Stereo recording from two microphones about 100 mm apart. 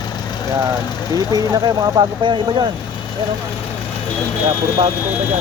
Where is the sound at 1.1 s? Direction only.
40° right (ahead or behind).